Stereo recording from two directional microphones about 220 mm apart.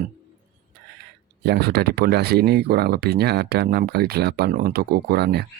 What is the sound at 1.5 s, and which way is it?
Speech, 45° right (ahead or behind).